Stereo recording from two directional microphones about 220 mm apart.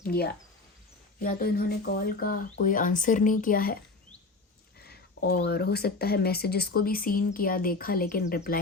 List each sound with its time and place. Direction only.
0.0 s speech: 45° left (ahead or behind)
4.9 s speech: 45° left (ahead or behind)